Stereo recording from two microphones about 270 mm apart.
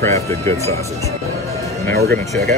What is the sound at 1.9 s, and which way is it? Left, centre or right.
Speech, right.